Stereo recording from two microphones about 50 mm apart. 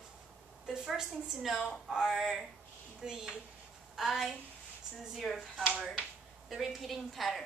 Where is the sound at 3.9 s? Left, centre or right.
Centre.